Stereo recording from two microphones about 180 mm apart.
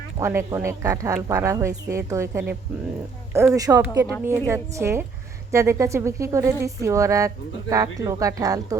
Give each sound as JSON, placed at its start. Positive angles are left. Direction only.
{"t": 0.2, "sound": "speech", "side_deg": -15}